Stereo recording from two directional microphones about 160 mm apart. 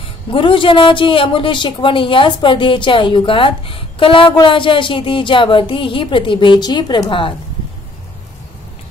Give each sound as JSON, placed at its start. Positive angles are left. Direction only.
{"t": 0.3, "sound": "a woman's voice", "side_deg": 30}